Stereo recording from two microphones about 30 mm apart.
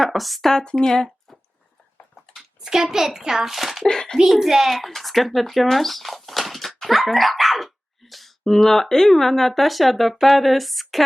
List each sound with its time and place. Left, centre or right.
0.0 s speech: centre
0.9 s a sound: centre
2.6 s a child's voice: centre
3.5 s speech: centre
3.9 s a child's voice: centre
4.3 s a child's voice: centre